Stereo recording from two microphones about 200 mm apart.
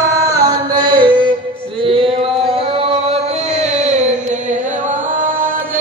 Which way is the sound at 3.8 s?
35° right (ahead or behind).